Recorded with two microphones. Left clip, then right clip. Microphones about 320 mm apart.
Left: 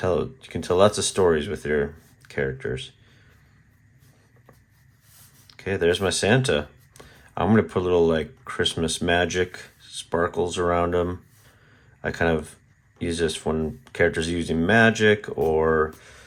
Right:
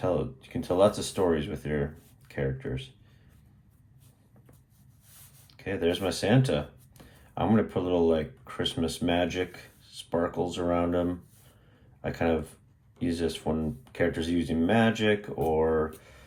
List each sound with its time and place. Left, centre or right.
0.0 s speech: left
5.5 s speech: left